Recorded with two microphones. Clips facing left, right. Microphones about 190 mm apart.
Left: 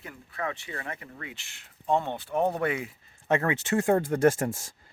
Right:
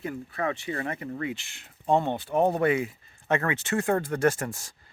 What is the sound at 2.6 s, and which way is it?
Speech, 10° right (ahead or behind).